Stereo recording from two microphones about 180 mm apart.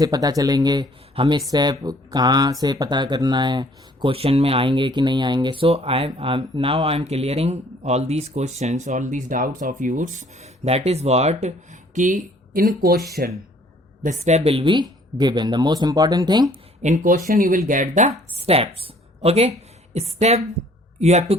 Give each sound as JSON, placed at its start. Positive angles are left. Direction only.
{"t": 0.0, "sound": "speech", "side_deg": -20}
{"t": 14.0, "sound": "speech", "side_deg": -40}
{"t": 16.8, "sound": "speech", "side_deg": -45}
{"t": 18.3, "sound": "a woman's voice", "side_deg": -35}